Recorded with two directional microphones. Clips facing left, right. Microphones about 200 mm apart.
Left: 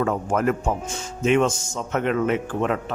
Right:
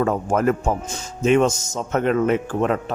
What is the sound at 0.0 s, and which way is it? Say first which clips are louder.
Speech: right 2 dB; 40° right (ahead or behind).